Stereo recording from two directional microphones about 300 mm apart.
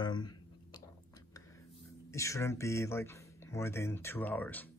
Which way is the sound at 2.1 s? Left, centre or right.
Centre.